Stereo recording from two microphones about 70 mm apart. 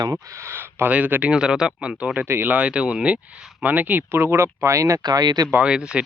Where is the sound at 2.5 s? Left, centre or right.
Centre; by 5.0 s right.